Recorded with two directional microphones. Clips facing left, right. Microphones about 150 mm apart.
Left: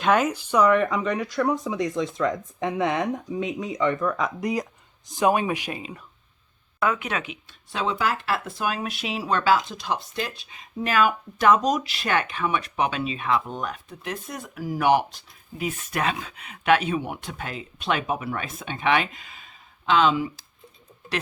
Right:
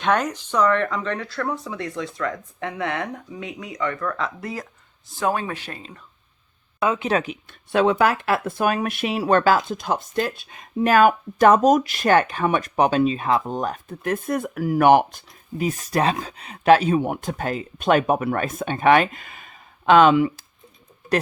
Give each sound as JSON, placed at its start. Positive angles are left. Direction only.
{"t": 0.0, "sound": "speech", "side_deg": 5}
{"t": 6.7, "sound": "speech", "side_deg": -20}
{"t": 7.1, "sound": "speech", "side_deg": -40}
{"t": 7.4, "sound": "speech", "side_deg": -60}